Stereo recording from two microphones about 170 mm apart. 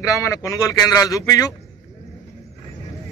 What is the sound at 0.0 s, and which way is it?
A man's voice, 20° left (ahead or behind).